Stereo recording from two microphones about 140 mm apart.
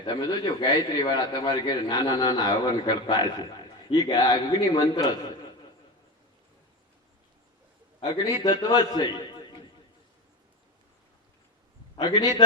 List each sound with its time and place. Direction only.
0.0 s a man's voice: 30° left (ahead or behind)
8.0 s a man's voice: 30° left (ahead or behind)
11.9 s a man's voice: 30° left (ahead or behind)